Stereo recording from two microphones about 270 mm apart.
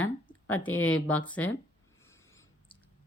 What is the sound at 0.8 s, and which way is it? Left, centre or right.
Speech, left.